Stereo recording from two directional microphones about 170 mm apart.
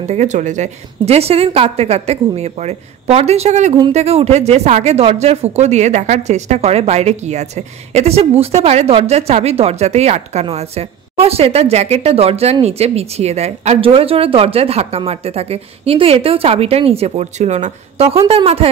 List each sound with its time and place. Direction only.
0.1 s speech: 40° right (ahead or behind)